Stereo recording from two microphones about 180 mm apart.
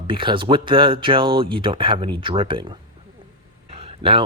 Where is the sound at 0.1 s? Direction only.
30° right (ahead or behind).